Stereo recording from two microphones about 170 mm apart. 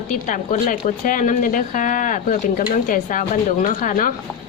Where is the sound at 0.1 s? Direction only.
50° left (ahead or behind).